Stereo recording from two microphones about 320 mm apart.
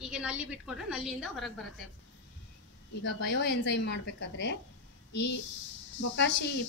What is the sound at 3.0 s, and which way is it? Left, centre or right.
Speech, left.